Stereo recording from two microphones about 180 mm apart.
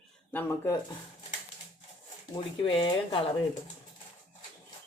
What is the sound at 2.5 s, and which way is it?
Speech, 30° left (ahead or behind).